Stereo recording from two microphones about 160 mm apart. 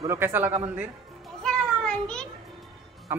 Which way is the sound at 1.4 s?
5° left (ahead or behind).